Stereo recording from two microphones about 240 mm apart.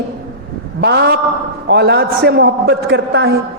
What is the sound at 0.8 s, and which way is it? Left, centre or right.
A man's voice, right.